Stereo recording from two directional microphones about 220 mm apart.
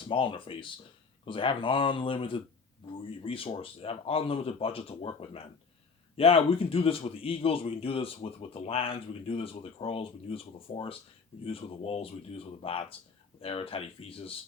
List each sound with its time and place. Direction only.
0.1 s a man's voice: 25° left (ahead or behind)